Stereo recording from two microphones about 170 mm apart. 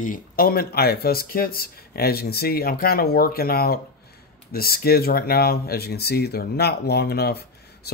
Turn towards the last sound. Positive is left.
turn(degrees=70)  # may be behind; listen again after turning